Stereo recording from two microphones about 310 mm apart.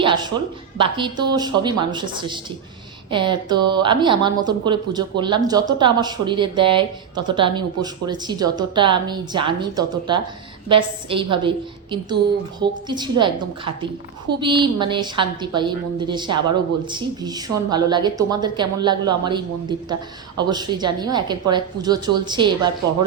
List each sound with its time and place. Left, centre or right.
0.0 s speech: centre
14.3 s speech: centre